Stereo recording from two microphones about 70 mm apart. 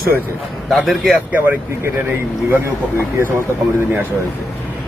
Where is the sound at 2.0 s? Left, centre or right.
Right.